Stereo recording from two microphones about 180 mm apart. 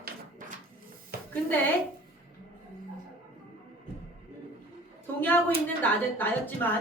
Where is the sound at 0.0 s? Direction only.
50° right (ahead or behind).